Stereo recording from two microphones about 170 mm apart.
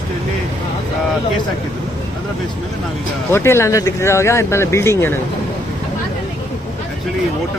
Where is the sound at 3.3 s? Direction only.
15° left (ahead or behind).